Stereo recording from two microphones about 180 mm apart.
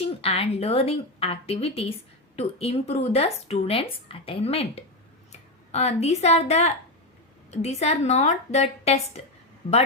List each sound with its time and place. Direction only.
0.0 s a woman's voice: 35° left (ahead or behind)